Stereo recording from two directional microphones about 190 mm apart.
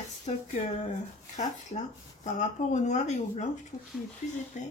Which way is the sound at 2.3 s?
40° left (ahead or behind).